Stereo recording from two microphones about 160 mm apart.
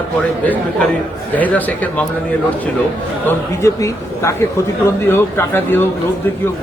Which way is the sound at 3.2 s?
20° left (ahead or behind).